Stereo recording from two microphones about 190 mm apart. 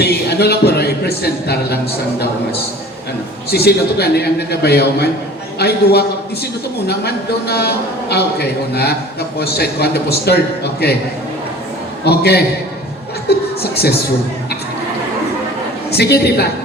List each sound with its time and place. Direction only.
0.0 s a sound: 60° left (ahead or behind)
3.5 s a man's voice: 60° left (ahead or behind)
12.0 s a man's voice: 60° left (ahead or behind)
15.9 s a man's voice: 60° left (ahead or behind)